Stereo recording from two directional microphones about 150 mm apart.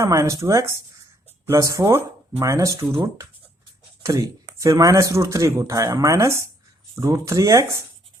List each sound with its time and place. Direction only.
0.0 s speech: 20° right (ahead or behind)